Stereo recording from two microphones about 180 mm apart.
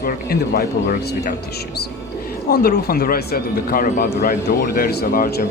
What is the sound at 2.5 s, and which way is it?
Speech, 55° left (ahead or behind).